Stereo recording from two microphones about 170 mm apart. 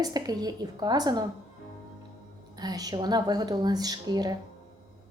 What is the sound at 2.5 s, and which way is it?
A woman's voice, 25° right (ahead or behind).